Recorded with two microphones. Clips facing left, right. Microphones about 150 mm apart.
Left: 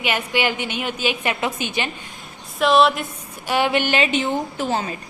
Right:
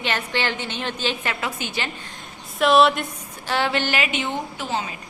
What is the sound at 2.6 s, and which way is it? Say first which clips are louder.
Speech: even; centre (ahead or behind).